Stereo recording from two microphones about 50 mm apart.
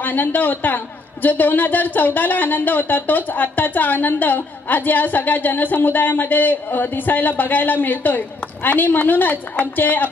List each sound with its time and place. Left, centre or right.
0.0 s speech: left